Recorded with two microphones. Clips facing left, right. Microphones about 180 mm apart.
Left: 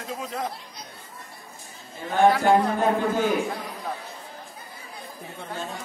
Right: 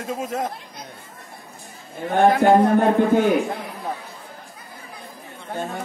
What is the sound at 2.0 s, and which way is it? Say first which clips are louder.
Speech: right 3 dB; 55° right (ahead or behind).